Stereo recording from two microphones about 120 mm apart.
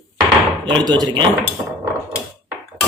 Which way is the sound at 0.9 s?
35° right (ahead or behind).